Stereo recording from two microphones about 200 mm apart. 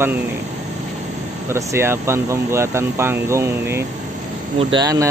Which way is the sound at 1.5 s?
15° right (ahead or behind).